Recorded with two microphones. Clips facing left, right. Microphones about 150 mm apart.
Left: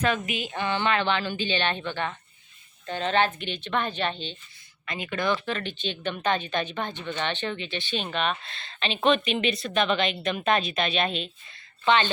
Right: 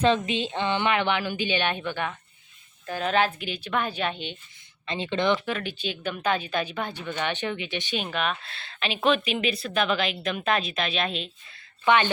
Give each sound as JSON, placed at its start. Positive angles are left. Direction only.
{"t": 0.0, "sound": "speech", "side_deg": -25}
{"t": 4.9, "sound": "speech", "side_deg": -25}
{"t": 5.5, "sound": "speech", "side_deg": -10}
{"t": 11.9, "sound": "speech", "side_deg": -15}